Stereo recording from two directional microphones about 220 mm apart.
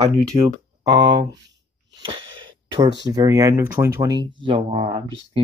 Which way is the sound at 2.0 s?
25° right (ahead or behind).